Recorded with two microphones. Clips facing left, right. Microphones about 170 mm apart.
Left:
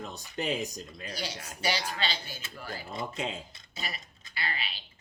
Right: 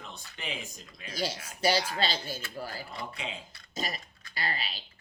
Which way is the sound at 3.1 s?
45° left (ahead or behind).